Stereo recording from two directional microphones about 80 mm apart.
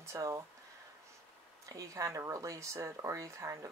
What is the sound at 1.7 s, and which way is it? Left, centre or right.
Speech, right.